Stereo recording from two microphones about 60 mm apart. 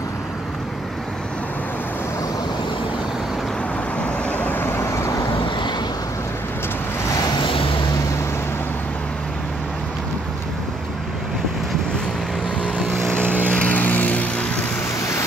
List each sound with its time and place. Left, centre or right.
4.0 s vehicle: left
12.9 s vehicle: right
13.5 s vehicle: left